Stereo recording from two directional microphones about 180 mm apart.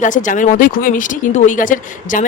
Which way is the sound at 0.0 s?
45° left (ahead or behind).